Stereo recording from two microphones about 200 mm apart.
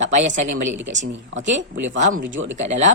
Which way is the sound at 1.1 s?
65° right (ahead or behind).